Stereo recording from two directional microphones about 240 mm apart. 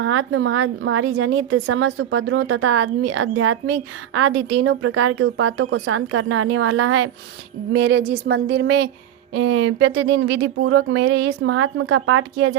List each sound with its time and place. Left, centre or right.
0.0 s a woman's voice: right